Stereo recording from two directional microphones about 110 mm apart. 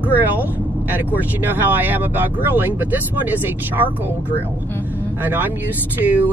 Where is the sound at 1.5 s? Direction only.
15° right (ahead or behind).